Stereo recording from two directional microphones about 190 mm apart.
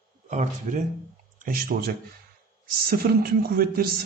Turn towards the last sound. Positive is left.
turn(degrees=-55)  # may be behind; listen again after turning